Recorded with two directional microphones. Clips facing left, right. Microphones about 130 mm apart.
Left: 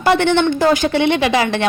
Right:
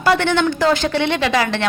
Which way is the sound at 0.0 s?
20° left (ahead or behind).